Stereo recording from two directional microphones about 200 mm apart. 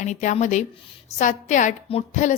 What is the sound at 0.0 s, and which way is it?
A woman's voice, 35° left (ahead or behind).